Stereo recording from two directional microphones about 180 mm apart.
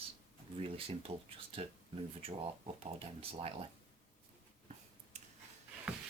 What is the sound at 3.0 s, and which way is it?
Speech, 30° right (ahead or behind).